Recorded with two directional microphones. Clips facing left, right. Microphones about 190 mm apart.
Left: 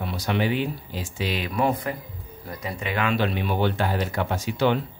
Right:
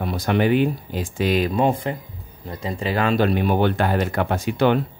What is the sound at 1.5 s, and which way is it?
Speech, 25° right (ahead or behind).